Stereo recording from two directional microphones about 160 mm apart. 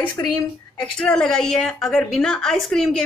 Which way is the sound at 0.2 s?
20° left (ahead or behind).